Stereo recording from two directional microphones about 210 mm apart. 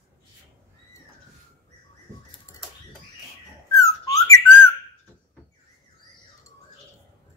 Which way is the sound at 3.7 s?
15° left (ahead or behind).